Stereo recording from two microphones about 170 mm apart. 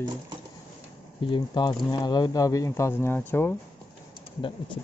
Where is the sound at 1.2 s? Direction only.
25° left (ahead or behind).